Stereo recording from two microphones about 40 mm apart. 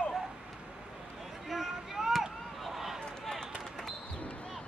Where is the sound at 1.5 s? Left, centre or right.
Centre.